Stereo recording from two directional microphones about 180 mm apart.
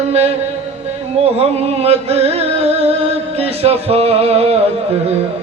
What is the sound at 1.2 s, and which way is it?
Music, 35° right (ahead or behind).